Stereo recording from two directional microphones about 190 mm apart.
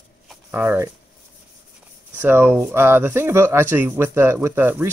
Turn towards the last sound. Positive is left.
turn(degrees=-10)  # may be behind; listen again after turning